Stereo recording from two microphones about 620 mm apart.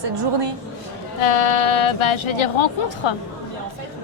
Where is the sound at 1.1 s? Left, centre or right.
Left.